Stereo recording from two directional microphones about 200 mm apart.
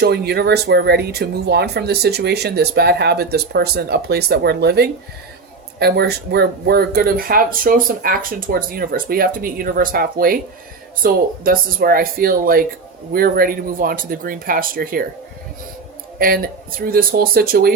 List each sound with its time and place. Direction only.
0.0 s speech: 55° right (ahead or behind)
16.1 s speech: 45° right (ahead or behind)